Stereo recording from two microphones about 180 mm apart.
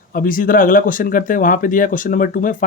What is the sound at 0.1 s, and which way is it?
Speech, 50° left (ahead or behind).